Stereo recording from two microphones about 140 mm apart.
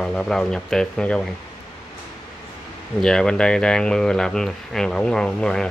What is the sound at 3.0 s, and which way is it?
Speech, 5° left (ahead or behind).